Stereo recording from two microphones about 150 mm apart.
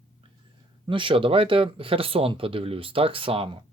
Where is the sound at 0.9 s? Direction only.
35° right (ahead or behind).